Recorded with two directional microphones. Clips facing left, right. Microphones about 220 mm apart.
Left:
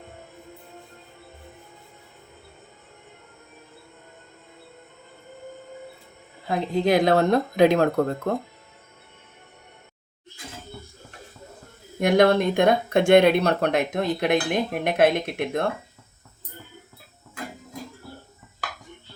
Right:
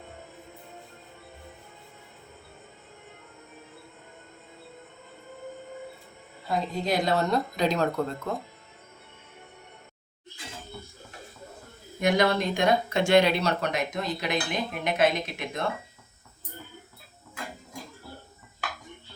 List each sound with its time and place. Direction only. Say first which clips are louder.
6.5 s speech: left 7 dB; 55° left (ahead or behind)
11.9 s speech: left 6 dB; 55° left (ahead or behind)